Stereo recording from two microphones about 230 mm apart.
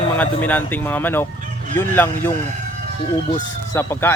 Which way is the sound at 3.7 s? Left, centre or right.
Centre.